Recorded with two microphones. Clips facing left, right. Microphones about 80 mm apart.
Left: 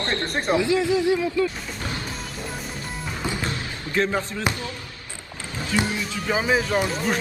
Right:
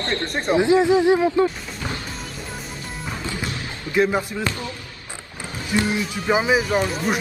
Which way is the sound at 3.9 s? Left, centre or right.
Centre.